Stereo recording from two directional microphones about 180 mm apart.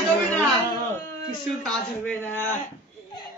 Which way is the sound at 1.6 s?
5° left (ahead or behind).